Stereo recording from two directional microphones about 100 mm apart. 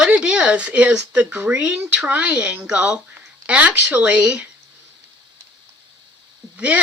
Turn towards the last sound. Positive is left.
turn(degrees=-15)  # may be behind; listen again after turning